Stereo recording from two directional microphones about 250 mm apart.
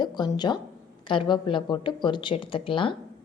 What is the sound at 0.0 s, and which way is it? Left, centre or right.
A woman's voice, centre.